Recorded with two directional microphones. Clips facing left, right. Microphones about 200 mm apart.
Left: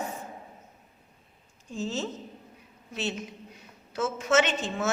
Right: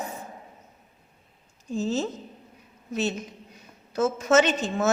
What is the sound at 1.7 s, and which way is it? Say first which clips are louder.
A woman's voice: right 5 dB; 40° right (ahead or behind).